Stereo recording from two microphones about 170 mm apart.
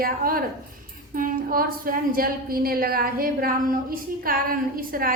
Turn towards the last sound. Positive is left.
turn(degrees=-55)  # may be behind; listen again after turning